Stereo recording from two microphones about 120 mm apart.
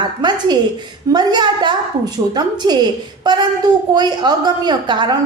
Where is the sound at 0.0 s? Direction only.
35° right (ahead or behind).